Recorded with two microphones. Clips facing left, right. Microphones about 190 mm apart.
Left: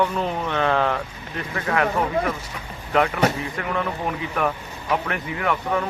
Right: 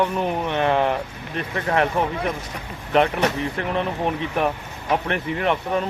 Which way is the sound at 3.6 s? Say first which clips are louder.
Right 2 dB; 25° right (ahead or behind).